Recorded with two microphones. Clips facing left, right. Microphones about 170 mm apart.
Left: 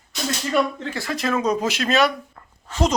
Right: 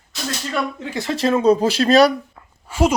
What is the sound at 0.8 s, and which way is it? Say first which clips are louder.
Speech: right 5 dB; 20° right (ahead or behind).